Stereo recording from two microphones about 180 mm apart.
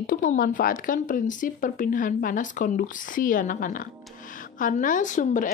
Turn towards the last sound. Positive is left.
turn(degrees=45)  # may be behind; listen again after turning